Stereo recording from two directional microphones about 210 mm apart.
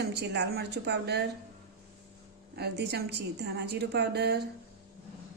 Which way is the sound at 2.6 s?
50° right (ahead or behind).